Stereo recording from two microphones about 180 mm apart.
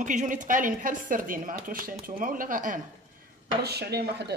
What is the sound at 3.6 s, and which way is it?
Speech, 65° right (ahead or behind).